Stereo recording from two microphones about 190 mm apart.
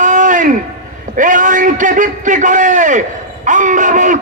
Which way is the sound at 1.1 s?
45° right (ahead or behind).